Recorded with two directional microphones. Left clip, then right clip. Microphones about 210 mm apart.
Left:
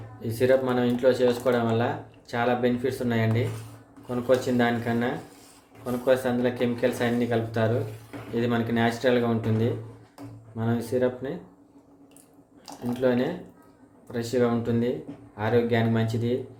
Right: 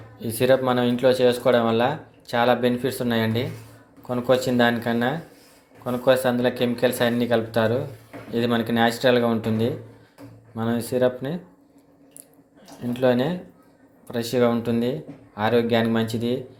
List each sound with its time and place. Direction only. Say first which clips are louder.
0.2 s speech: right 3 dB; 15° right (ahead or behind)
13.0 s speech: right 4 dB; 15° right (ahead or behind)